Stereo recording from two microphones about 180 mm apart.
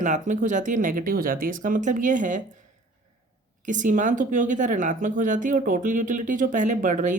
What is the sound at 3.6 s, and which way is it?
Speech, 45° right (ahead or behind).